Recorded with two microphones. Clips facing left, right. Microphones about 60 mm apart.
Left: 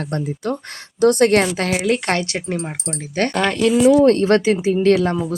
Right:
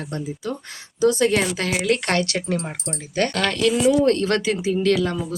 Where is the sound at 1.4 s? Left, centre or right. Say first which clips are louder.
Left 4 dB; left.